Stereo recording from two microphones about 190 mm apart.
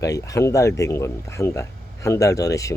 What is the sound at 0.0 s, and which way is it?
Speech, 15° left (ahead or behind).